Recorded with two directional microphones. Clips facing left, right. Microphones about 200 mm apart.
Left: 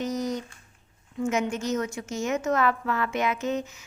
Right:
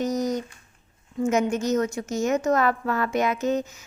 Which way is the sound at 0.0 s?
40° right (ahead or behind).